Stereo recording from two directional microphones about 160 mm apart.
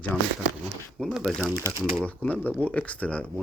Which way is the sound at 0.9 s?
5° right (ahead or behind).